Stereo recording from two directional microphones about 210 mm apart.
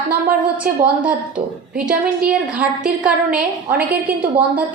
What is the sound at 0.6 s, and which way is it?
Speech, 45° right (ahead or behind).